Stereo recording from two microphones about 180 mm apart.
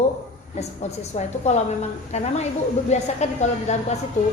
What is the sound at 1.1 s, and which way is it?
A woman's voice, 40° left (ahead or behind).